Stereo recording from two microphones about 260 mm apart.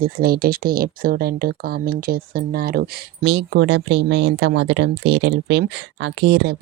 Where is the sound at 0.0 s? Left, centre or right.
Right.